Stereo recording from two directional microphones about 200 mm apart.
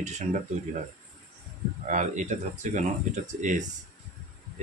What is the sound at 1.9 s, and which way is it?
Speech, 35° right (ahead or behind).